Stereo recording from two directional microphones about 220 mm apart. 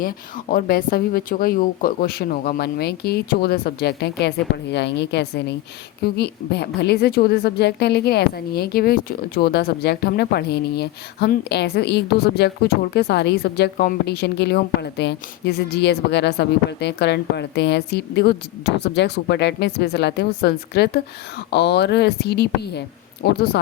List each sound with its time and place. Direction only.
0.5 s a woman's voice: 40° left (ahead or behind)